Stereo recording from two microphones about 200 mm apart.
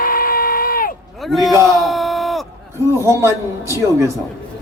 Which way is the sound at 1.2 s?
Centre (ahead or behind).